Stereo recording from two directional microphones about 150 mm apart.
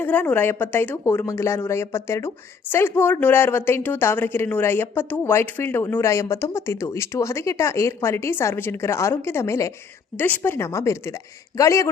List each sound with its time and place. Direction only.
0.0 s a man's voice: 10° left (ahead or behind)